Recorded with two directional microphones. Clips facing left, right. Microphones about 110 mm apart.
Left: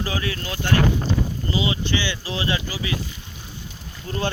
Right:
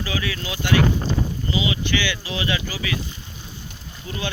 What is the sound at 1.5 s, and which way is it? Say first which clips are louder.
Speech: even; 35° left (ahead or behind).